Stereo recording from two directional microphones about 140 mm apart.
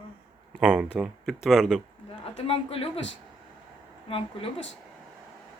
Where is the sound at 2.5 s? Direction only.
40° left (ahead or behind).